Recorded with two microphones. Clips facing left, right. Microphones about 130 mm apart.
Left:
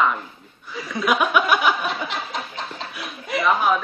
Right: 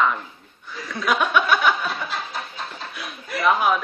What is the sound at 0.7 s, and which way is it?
Chuckle, 10° left (ahead or behind).